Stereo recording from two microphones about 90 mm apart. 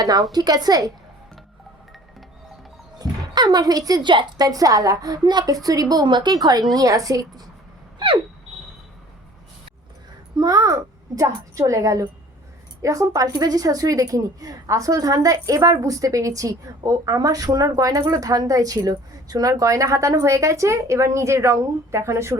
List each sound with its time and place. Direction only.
0.0 s a woman's voice: 45° right (ahead or behind)
3.0 s speech: 50° right (ahead or behind)
4.1 s a woman's voice: 65° right (ahead or behind)
4.4 s a woman's voice: 45° right (ahead or behind)
7.9 s a sound: 65° right (ahead or behind)
10.3 s a child's voice: 45° right (ahead or behind)